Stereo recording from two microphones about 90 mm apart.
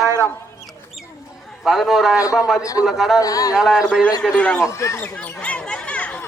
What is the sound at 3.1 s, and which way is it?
Speech, 40° left (ahead or behind).